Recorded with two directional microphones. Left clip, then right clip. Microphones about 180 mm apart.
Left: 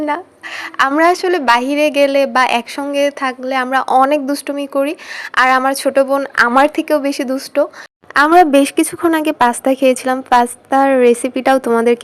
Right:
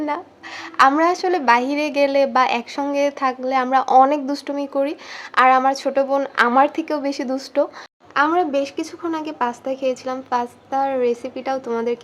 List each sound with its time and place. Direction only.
0.8 s a woman's voice: 20° left (ahead or behind)
8.3 s a woman's voice: 45° left (ahead or behind)